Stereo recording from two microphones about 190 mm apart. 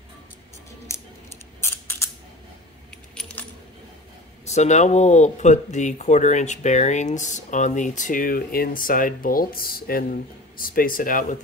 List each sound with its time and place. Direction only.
0.8 s scissors: 15° left (ahead or behind)
3.2 s keys jangling: 5° left (ahead or behind)
4.5 s speech: 35° left (ahead or behind)